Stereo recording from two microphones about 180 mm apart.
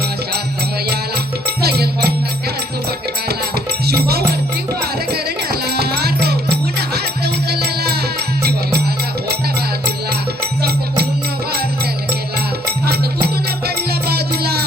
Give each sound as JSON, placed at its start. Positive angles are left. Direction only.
{"t": 1.5, "sound": "music", "side_deg": -60}
{"t": 3.8, "sound": "music", "side_deg": -60}
{"t": 13.2, "sound": "music", "side_deg": -60}